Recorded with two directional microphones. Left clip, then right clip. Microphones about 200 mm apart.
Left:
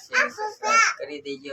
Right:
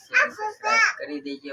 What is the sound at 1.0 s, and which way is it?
Speech, centre (ahead or behind).